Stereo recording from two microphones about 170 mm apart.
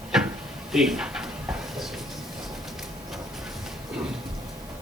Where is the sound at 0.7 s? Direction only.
5° right (ahead or behind).